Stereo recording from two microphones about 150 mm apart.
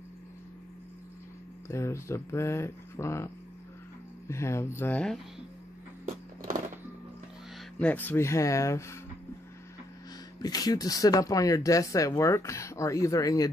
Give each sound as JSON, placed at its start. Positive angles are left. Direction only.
{"t": 1.7, "sound": "speech", "side_deg": 20}
{"t": 4.3, "sound": "speech", "side_deg": 20}
{"t": 7.8, "sound": "speech", "side_deg": 10}
{"t": 10.4, "sound": "speech", "side_deg": 25}